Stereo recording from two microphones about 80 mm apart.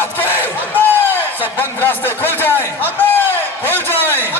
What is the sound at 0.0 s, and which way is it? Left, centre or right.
Battle cry, left.